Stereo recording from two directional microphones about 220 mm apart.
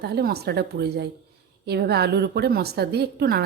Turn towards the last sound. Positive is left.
turn(degrees=-45)  # may be behind; listen again after turning